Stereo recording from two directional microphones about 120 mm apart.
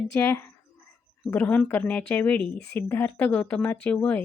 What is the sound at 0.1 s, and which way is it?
Speech, 20° left (ahead or behind).